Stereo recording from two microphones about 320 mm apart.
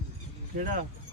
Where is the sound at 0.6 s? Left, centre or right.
Right.